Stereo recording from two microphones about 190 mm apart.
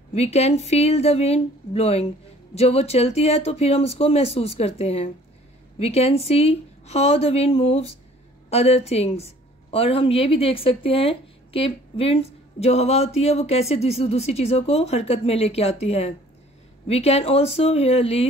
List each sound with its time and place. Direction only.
0.1 s a woman's voice: 35° left (ahead or behind)